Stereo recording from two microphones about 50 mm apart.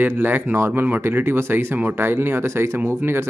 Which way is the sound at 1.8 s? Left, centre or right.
Right.